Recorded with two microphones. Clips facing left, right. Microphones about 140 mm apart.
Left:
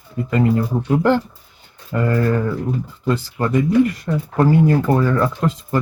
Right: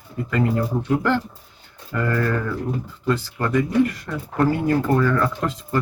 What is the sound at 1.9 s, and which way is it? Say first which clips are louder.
Speech: left 4 dB; 20° left (ahead or behind).